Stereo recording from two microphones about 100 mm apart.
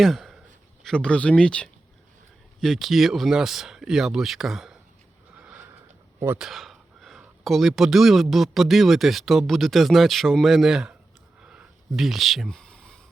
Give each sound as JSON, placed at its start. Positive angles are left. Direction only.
{"t": 0.0, "sound": "a sound", "side_deg": 0}
{"t": 0.9, "sound": "speech", "side_deg": 10}
{"t": 5.3, "sound": "sniff", "side_deg": -15}
{"t": 6.1, "sound": "speech", "side_deg": -25}
{"t": 6.4, "sound": "speech", "side_deg": 0}
{"t": 11.4, "sound": "a sound", "side_deg": -5}